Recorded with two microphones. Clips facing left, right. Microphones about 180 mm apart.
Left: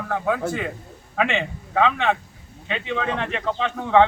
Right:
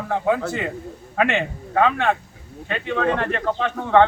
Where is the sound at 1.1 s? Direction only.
5° right (ahead or behind).